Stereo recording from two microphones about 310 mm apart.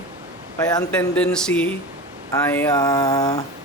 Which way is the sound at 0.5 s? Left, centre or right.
Centre.